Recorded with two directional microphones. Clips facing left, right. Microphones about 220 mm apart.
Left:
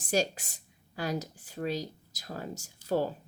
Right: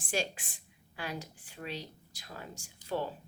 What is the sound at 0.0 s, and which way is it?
A woman's voice, 40° left (ahead or behind).